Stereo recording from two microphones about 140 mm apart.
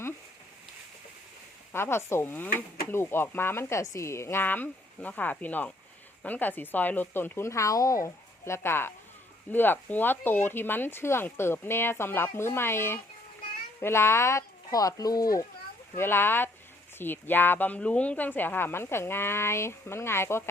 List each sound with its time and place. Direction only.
1.7 s speech: 15° left (ahead or behind)